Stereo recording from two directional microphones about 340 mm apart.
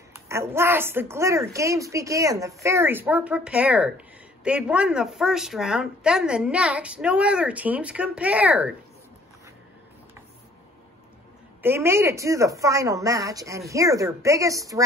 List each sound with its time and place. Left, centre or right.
0.3 s a woman's voice: centre
11.6 s a woman's voice: centre